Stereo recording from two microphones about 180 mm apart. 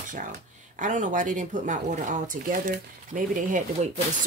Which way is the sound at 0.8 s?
45° right (ahead or behind).